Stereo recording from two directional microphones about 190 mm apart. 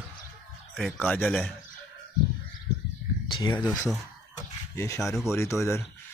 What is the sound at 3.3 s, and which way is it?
Speech, 25° left (ahead or behind).